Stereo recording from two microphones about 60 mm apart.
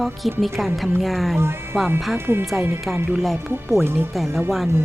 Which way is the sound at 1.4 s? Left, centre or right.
Right.